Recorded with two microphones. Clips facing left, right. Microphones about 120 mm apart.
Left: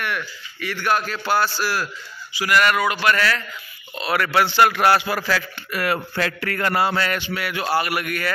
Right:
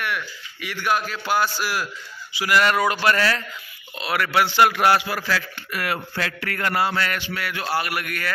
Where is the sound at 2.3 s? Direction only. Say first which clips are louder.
Left 1 dB; 20° right (ahead or behind).